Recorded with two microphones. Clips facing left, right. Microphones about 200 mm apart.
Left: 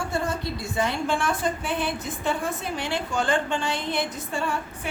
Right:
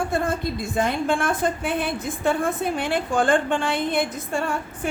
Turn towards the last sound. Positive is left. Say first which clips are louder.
# right 4 dB
turn(degrees=-55)  # may be behind; listen again after turning